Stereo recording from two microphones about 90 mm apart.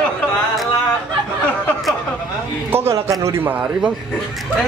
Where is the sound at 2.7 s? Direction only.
25° right (ahead or behind).